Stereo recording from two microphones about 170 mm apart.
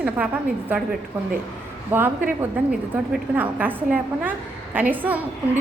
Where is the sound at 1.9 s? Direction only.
10° right (ahead or behind).